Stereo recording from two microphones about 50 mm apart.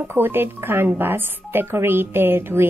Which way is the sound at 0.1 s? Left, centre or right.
Right.